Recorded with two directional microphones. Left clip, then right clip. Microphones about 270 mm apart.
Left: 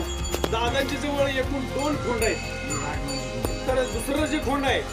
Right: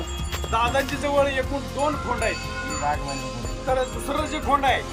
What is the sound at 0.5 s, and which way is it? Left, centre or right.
Speech, centre.